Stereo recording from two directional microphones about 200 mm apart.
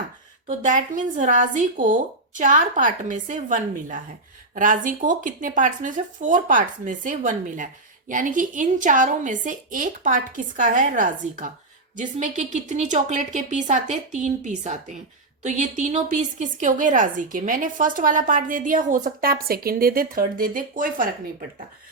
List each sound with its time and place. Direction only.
0.4 s speech: 40° right (ahead or behind)